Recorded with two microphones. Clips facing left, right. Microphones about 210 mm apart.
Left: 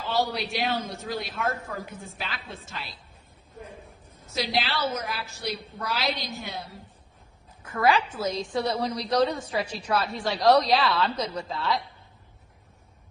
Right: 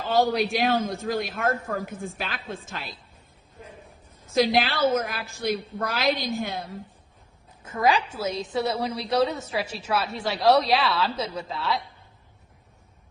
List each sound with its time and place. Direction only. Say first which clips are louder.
0.0 s a man's voice: right 5 dB; 50° right (ahead or behind)
4.4 s a man's voice: right 6 dB; 50° right (ahead or behind)
7.6 s a woman's voice: even; 20° right (ahead or behind); by 11.8 s centre (ahead or behind)